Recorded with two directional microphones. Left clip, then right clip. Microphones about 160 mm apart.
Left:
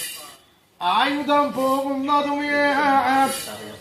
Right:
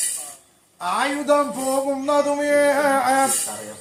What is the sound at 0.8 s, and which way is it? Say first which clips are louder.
Music: left 2 dB; 25° right (ahead or behind).